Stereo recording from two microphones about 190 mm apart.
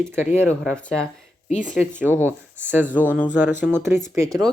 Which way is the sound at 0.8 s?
5° left (ahead or behind).